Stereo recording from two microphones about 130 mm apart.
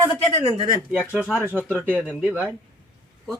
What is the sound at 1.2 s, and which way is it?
Speech, centre (ahead or behind).